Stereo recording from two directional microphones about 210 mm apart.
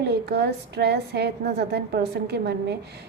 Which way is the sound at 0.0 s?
50° right (ahead or behind).